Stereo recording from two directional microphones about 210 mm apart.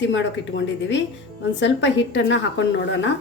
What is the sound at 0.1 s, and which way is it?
A woman's voice, 60° left (ahead or behind).